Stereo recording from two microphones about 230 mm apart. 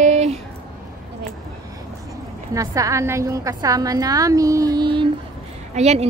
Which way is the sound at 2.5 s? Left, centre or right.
Centre.